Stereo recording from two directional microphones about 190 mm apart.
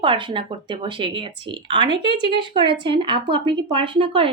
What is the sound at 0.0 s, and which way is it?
A woman's voice, 25° right (ahead or behind).